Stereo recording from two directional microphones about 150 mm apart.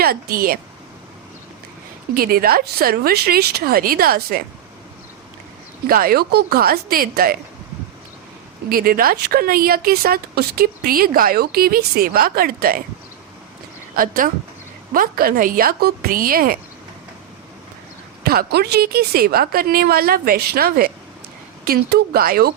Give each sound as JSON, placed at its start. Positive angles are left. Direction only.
{"t": 0.0, "sound": "speech", "side_deg": -85}
{"t": 2.1, "sound": "speech", "side_deg": -80}
{"t": 5.9, "sound": "speech", "side_deg": -80}
{"t": 8.7, "sound": "speech", "side_deg": -75}
{"t": 13.9, "sound": "a woman's voice", "side_deg": -70}
{"t": 18.2, "sound": "a woman's voice", "side_deg": -90}